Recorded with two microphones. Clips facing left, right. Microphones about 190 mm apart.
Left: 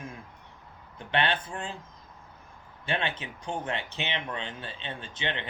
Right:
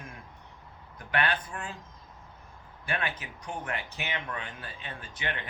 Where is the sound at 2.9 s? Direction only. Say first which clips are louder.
Left 3 dB; 25° left (ahead or behind).